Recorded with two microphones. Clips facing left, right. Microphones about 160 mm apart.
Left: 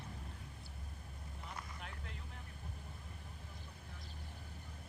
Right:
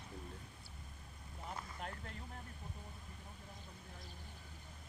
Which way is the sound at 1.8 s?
40° right (ahead or behind).